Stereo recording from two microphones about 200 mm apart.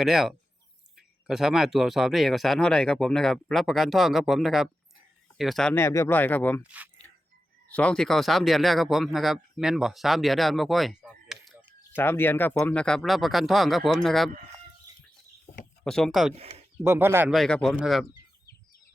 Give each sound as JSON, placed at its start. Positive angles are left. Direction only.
{"t": 0.0, "sound": "speech", "side_deg": 0}
{"t": 6.6, "sound": "speech", "side_deg": -5}
{"t": 7.7, "sound": "speech", "side_deg": 5}
{"t": 11.9, "sound": "speech", "side_deg": 10}
{"t": 15.8, "sound": "speech", "side_deg": 5}
{"t": 16.4, "sound": "speech", "side_deg": -30}
{"t": 16.8, "sound": "speech", "side_deg": -15}
{"t": 17.3, "sound": "speech", "side_deg": 0}